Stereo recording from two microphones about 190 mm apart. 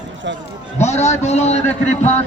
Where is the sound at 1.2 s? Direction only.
35° left (ahead or behind).